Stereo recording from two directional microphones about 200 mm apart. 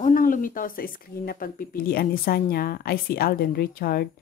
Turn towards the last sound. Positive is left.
turn(degrees=50)  # may be behind; listen again after turning